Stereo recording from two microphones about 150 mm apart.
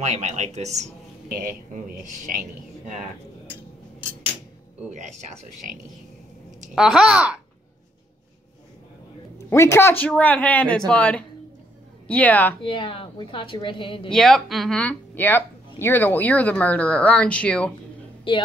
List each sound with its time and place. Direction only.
0.0 s speech: 50° right (ahead or behind)
1.3 s speech: 70° right (ahead or behind)
6.7 s a child's voice: 5° right (ahead or behind)
9.5 s speech: 20° left (ahead or behind)
12.6 s a woman's voice: 35° left (ahead or behind)
14.1 s speech: 5° left (ahead or behind)
18.3 s a woman's voice: 35° left (ahead or behind)